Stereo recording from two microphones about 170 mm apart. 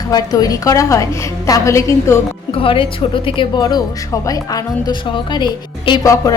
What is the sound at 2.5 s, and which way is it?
A woman's voice, 30° left (ahead or behind).